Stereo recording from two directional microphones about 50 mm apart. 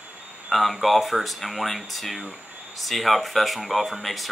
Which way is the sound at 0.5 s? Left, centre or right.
Centre.